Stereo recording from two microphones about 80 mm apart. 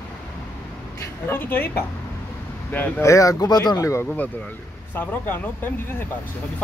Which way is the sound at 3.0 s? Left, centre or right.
Left.